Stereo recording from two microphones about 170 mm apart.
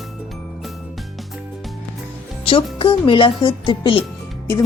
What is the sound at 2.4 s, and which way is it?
A woman's voice, 30° left (ahead or behind).